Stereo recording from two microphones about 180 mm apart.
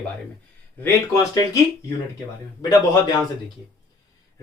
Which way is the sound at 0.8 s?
20° left (ahead or behind).